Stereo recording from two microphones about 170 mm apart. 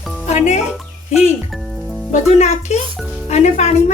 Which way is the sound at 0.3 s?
40° left (ahead or behind).